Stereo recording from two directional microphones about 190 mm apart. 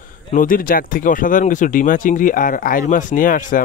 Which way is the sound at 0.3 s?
45° left (ahead or behind).